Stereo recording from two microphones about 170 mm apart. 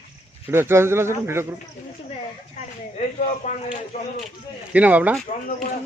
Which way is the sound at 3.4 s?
45° left (ahead or behind).